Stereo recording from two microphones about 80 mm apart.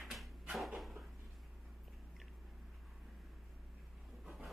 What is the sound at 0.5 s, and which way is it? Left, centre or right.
Cupboard open or close, centre.